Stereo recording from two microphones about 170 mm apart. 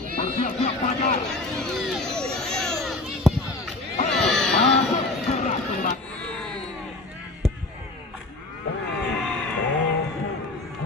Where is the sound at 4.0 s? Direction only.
40° left (ahead or behind).